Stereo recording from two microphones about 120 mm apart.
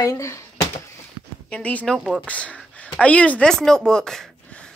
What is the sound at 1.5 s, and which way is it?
Speech, 10° left (ahead or behind).